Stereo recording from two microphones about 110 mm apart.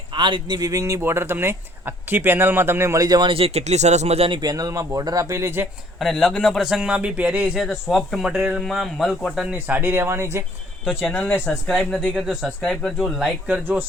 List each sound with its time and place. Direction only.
0.1 s speech: 45° right (ahead or behind)
3.3 s speech: 70° right (ahead or behind)
4.3 s speech: 40° right (ahead or behind)
6.0 s a man's voice: centre (ahead or behind)
8.6 s a man's voice: centre (ahead or behind)
9.5 s speech: 15° right (ahead or behind)
11.0 s a man's voice: 10° left (ahead or behind)
13.5 s speech: 20° right (ahead or behind)